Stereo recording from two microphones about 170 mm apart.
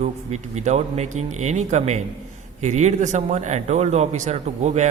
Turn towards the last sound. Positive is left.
turn(degrees=-40)  # may be behind; listen again after turning